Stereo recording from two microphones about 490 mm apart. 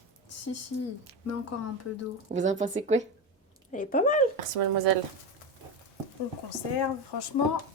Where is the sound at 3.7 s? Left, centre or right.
Centre.